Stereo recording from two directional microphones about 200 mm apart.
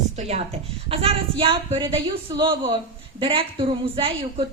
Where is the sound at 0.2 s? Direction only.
35° right (ahead or behind).